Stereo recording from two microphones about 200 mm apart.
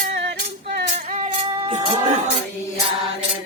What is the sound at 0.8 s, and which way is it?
Music, 30° right (ahead or behind).